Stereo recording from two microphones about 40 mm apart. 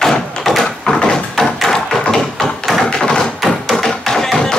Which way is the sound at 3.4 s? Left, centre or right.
Centre.